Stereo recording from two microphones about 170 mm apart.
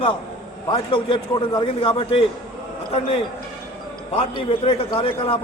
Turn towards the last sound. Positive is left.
turn(degrees=35)  # may be behind; listen again after turning